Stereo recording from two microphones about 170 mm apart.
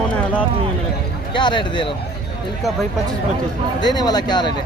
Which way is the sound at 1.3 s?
30° left (ahead or behind).